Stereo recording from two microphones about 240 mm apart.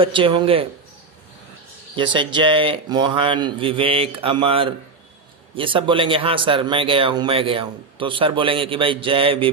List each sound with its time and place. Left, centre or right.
0.0 s a man's voice: right
2.0 s a man's voice: centre